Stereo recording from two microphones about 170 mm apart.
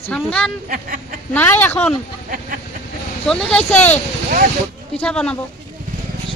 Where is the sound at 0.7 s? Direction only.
55° right (ahead or behind).